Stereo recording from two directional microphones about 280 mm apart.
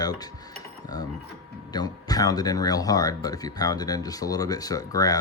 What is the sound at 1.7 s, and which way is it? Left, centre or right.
Speech, centre.